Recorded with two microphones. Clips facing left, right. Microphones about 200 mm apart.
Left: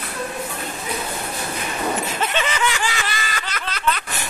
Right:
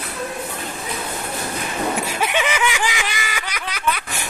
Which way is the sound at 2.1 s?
10° right (ahead or behind).